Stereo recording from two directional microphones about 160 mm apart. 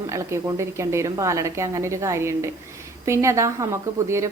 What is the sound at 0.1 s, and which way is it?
A woman's voice, 20° right (ahead or behind).